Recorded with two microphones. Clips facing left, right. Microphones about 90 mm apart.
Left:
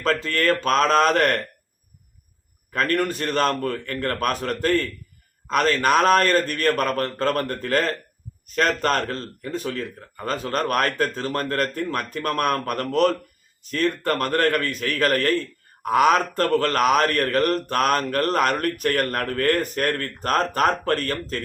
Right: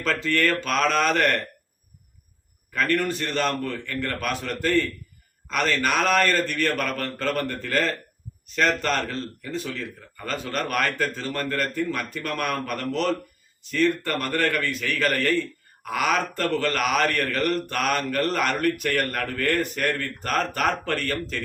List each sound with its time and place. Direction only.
0.0 s a man's voice: 35° left (ahead or behind)
2.7 s a man's voice: 45° left (ahead or behind)